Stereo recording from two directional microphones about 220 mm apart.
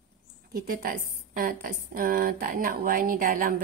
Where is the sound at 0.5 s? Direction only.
40° right (ahead or behind).